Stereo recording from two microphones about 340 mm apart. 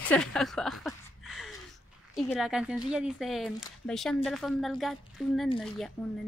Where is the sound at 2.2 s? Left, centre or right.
Centre.